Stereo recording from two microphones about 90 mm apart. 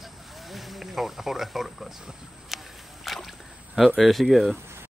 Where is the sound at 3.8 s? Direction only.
Centre (ahead or behind).